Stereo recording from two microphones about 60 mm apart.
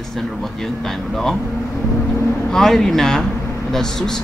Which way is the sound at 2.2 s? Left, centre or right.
Left.